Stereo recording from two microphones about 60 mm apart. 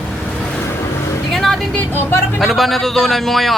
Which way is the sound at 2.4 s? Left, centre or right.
Centre.